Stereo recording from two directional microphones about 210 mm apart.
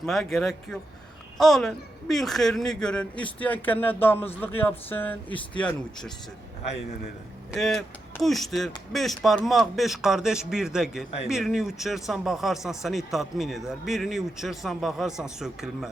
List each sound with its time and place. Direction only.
0.0 s speech: centre (ahead or behind)
7.5 s speech: centre (ahead or behind)